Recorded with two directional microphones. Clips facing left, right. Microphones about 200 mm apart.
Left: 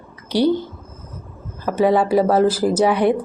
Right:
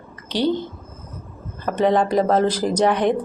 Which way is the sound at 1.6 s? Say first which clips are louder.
Left 2 dB; 5° left (ahead or behind).